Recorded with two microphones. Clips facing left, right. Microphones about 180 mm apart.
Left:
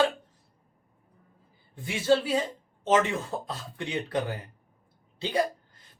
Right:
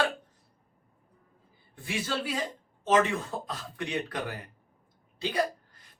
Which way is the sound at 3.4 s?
25° left (ahead or behind).